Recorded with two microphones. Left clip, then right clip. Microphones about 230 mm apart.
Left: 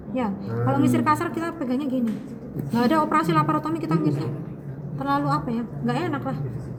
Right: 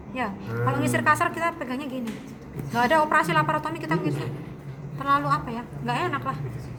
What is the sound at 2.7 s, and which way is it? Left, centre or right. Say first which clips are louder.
A woman's voice: right 1 dB; right.